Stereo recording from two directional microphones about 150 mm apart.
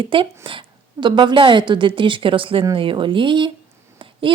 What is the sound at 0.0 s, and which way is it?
A woman's voice, 35° right (ahead or behind).